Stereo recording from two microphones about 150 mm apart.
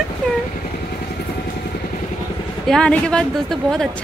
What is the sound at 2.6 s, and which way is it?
A woman's voice, 5° left (ahead or behind).